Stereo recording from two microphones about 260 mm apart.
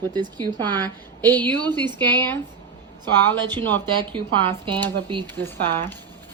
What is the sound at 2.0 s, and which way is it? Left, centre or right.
Speech, centre.